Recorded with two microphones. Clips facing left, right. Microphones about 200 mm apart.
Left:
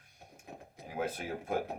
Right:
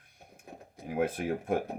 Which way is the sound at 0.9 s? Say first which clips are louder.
Right 6 dB; 60° right (ahead or behind).